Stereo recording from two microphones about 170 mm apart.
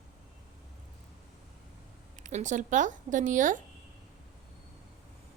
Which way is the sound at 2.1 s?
45° right (ahead or behind).